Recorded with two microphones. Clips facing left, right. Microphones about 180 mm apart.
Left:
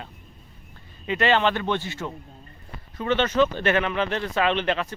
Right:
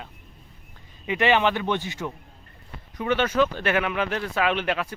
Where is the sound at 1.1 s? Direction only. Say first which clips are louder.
Even; 15° right (ahead or behind).